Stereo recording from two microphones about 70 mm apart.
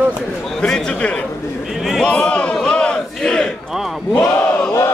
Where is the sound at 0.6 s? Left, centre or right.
Centre.